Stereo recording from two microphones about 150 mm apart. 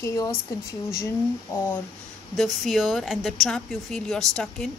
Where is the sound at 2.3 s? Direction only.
Centre (ahead or behind).